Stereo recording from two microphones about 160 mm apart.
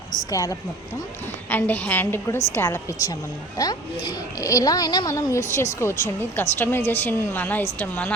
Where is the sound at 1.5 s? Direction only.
10° left (ahead or behind).